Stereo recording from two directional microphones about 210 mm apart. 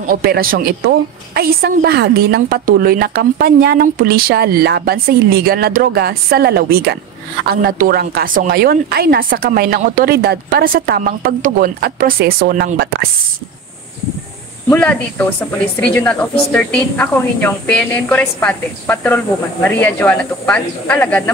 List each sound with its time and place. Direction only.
0.1 s a woman's voice: 45° right (ahead or behind)
14.7 s a woman's voice: 10° left (ahead or behind)